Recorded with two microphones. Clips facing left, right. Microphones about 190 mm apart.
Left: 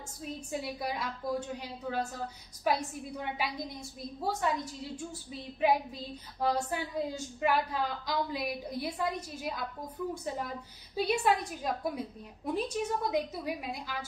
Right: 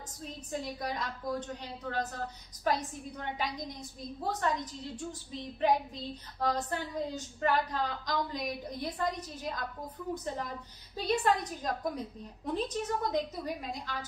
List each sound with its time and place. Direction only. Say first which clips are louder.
0.5 s a woman's voice: even; 10° left (ahead or behind)